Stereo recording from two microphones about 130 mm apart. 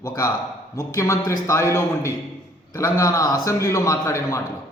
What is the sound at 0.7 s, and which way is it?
A man's voice, 25° left (ahead or behind).